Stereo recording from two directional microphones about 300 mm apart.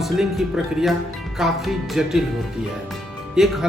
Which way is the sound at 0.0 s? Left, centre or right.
Centre.